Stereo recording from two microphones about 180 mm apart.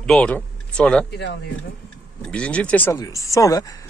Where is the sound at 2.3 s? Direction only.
5° left (ahead or behind).